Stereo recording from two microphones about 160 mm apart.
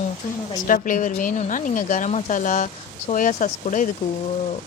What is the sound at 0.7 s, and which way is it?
A woman's voice, 55° left (ahead or behind).